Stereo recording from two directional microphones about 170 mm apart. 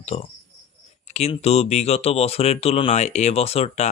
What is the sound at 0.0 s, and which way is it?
Speech, 40° left (ahead or behind).